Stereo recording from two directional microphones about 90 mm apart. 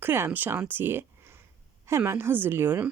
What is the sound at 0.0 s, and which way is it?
Speech, 25° right (ahead or behind).